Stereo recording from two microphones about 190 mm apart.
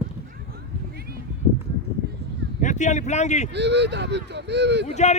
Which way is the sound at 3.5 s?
65° right (ahead or behind).